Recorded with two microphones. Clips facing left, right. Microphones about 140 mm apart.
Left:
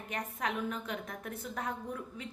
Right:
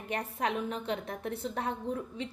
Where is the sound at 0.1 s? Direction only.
30° right (ahead or behind).